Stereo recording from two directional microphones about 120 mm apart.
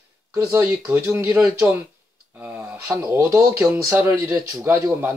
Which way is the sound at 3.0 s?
25° right (ahead or behind).